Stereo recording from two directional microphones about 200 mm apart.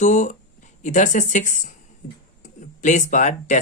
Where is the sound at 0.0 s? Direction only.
35° left (ahead or behind).